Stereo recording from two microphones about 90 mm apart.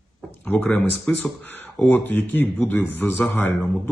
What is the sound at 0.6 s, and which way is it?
Speech, 5° left (ahead or behind).